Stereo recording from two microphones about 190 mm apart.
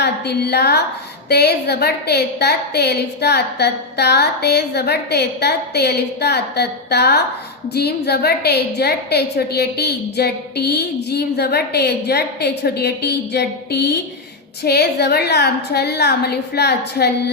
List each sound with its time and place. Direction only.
0.0 s a woman's voice: 60° left (ahead or behind)